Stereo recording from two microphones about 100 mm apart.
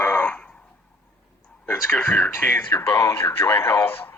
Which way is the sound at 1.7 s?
30° left (ahead or behind).